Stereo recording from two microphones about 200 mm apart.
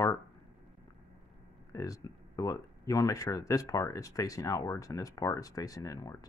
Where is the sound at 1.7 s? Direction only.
15° left (ahead or behind).